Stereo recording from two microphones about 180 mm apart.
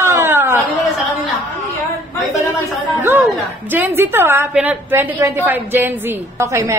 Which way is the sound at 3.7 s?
15° right (ahead or behind).